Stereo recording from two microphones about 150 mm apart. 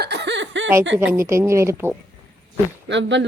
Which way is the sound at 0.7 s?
15° right (ahead or behind).